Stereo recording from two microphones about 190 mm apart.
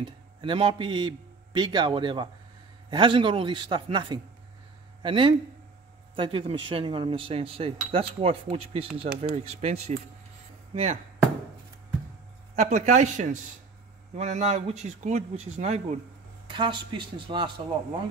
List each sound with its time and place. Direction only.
0.0 s a man's voice: 25° right (ahead or behind)
10.7 s chop: 35° right (ahead or behind)
12.5 s speech: 35° right (ahead or behind)
16.4 s speech: 25° right (ahead or behind)